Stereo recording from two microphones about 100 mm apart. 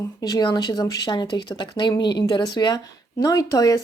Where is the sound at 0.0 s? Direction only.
40° left (ahead or behind).